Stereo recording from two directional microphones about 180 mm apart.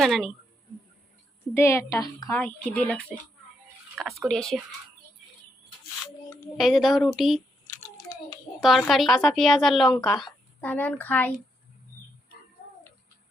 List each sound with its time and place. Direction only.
0.0 s a woman's voice: centre (ahead or behind)
1.5 s a woman's voice: 15° left (ahead or behind)
2.4 s a woman's voice: 10° left (ahead or behind)
6.6 s a woman's voice: centre (ahead or behind)
8.6 s a woman's voice: centre (ahead or behind)